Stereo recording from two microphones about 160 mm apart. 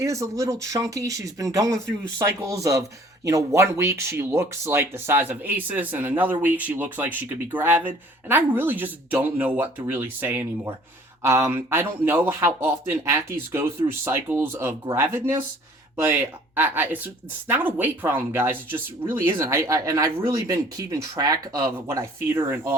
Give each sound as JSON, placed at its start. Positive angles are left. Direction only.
{"t": 0.0, "sound": "speech", "side_deg": -20}